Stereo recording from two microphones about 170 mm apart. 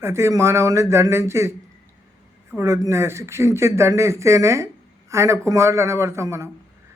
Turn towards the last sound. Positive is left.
turn(degrees=-15)  # may be behind; listen again after turning